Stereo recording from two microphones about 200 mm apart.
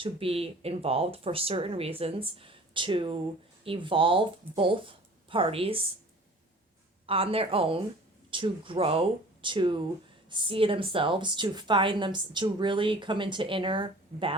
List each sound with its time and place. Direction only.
0.0 s speech: 30° right (ahead or behind)
7.1 s speech: 30° right (ahead or behind)